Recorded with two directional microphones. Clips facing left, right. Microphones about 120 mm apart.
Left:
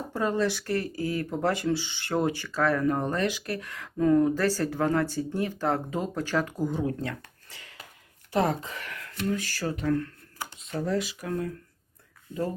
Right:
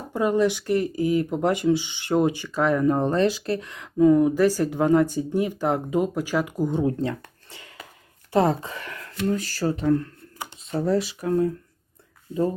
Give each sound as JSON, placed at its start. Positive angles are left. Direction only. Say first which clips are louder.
{"t": 0.1, "sound": "speech", "louder": "right 6 dB", "side_deg": -15}
{"t": 6.7, "sound": "speech", "louder": "right 6 dB", "side_deg": -25}